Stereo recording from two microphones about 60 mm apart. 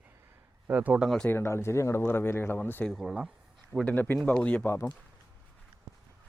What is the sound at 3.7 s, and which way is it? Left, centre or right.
Speech, right.